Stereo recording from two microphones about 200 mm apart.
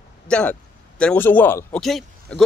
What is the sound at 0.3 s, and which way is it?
A man's voice, 5° left (ahead or behind).